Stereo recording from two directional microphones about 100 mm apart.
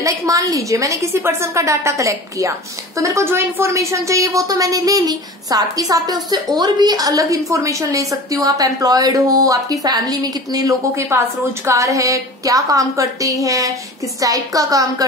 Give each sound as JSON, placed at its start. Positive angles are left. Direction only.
{"t": 0.0, "sound": "a woman's voice", "side_deg": -35}